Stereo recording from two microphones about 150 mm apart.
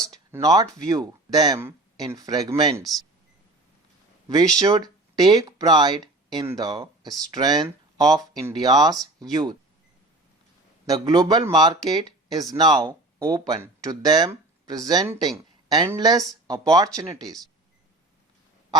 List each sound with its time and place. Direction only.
0.0 s a man's voice: 20° right (ahead or behind)
4.3 s a man's voice: 25° right (ahead or behind)
10.8 s a man's voice: 25° right (ahead or behind)